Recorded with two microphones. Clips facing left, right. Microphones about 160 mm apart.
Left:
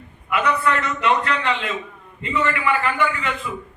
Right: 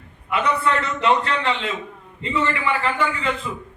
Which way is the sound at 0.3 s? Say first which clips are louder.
Left 1 dB; 30° right (ahead or behind).